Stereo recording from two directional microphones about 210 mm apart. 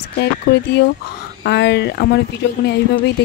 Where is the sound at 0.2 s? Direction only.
55° left (ahead or behind).